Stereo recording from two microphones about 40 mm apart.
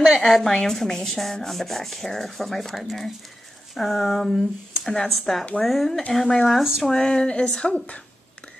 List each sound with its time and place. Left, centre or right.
0.3 s speech: centre
6.9 s speech: centre; by 8.0 s left